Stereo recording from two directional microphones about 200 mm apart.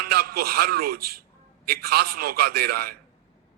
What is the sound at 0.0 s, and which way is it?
A man's voice, 50° right (ahead or behind).